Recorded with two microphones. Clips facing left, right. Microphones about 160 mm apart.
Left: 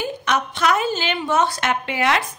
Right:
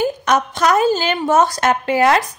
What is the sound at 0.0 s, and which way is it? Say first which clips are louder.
A woman's voice: right 6 dB; 40° right (ahead or behind).